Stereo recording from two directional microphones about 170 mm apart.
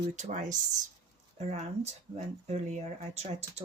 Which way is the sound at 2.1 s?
40° right (ahead or behind).